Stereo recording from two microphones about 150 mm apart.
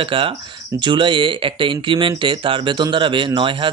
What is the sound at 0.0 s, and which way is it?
Speech, 35° right (ahead or behind).